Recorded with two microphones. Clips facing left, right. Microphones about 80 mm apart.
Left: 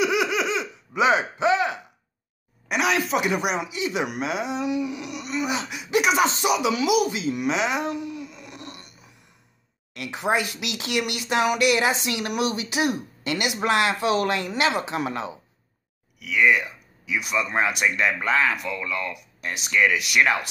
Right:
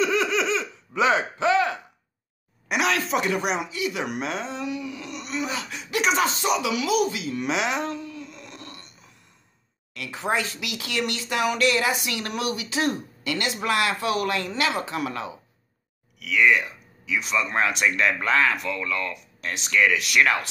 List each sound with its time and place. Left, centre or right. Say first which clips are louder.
0.0 s laughter: even; centre
2.7 s speech: left 1 dB; centre
3.7 s speech: left 1 dB; left
4.0 s speech: left 2 dB; centre
4.5 s speech: left 5 dB; centre
5.1 s groan: right 2 dB; centre
5.5 s speech: left 5 dB; centre
7.4 s speech: left 1 dB; centre
7.8 s a sound: left 2 dB; centre
8.3 s burping: left 1 dB; centre
9.9 s speech: left 2 dB; centre
16.2 s speech: even; centre
19.1 s speech: even; centre